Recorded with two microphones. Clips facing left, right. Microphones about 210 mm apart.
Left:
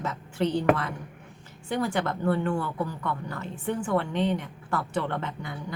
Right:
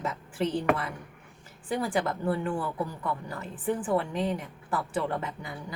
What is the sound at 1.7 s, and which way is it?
Speech, 5° right (ahead or behind).